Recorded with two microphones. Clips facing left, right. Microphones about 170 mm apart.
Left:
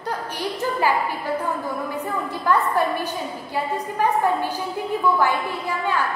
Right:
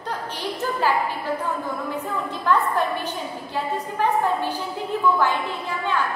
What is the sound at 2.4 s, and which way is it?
A woman's voice, 10° left (ahead or behind).